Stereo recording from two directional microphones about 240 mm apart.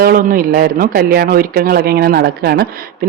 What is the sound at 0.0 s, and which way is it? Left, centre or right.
Speech, right.